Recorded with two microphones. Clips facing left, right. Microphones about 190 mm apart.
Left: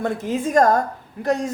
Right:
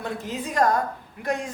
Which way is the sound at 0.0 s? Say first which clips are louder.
Left 8 dB; 50° left (ahead or behind).